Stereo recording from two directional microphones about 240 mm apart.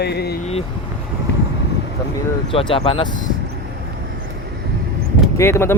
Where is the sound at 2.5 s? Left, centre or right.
Left.